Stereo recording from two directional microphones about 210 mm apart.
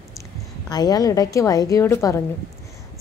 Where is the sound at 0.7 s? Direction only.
20° left (ahead or behind).